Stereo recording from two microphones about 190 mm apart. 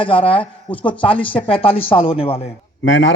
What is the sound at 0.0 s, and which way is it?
Speech, 25° left (ahead or behind).